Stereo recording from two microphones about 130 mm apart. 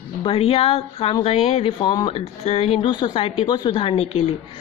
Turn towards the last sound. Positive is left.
turn(degrees=45)  # may be behind; listen again after turning